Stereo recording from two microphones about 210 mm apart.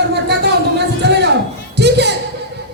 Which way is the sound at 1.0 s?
55° right (ahead or behind).